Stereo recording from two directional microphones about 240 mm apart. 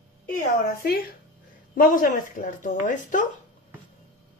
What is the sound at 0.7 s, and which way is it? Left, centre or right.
Speech, left.